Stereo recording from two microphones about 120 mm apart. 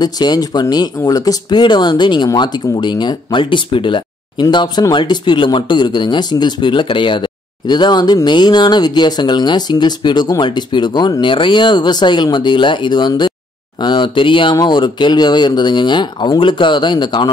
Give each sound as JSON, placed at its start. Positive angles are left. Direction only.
{"t": 0.0, "sound": "speech", "side_deg": 35}